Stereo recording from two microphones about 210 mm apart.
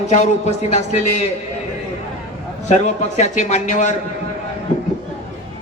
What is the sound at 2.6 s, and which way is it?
A man's voice, 35° left (ahead or behind).